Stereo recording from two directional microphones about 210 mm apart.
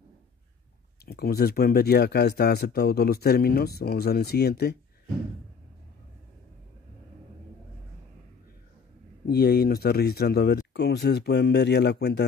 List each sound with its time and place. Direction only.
1.0 s speech: 45° left (ahead or behind)
9.3 s speech: 50° left (ahead or behind)